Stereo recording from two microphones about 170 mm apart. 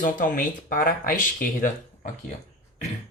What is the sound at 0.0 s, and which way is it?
Speech, 50° left (ahead or behind).